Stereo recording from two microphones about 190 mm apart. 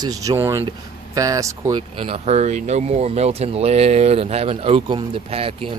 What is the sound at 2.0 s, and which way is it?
Speech, 30° right (ahead or behind).